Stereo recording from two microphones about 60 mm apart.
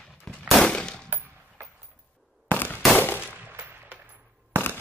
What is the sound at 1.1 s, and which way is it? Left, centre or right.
Coin, right.